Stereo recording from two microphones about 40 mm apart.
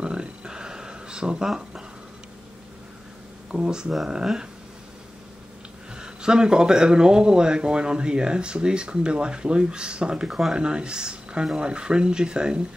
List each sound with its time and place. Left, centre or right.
0.0 s a sound: right
1.5 s speech: centre
3.5 s speech: centre
5.9 s speech: centre